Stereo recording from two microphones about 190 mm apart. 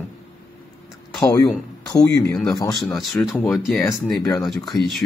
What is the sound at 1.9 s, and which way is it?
Speech, 20° left (ahead or behind).